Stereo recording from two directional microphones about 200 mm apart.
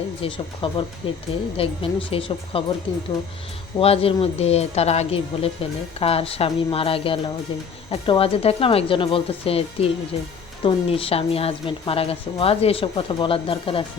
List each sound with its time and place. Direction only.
0.2 s a woman's voice: 25° left (ahead or behind)
3.8 s a woman's voice: 30° left (ahead or behind)